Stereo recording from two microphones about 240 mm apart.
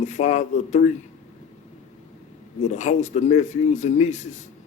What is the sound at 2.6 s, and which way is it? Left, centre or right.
Speech, left.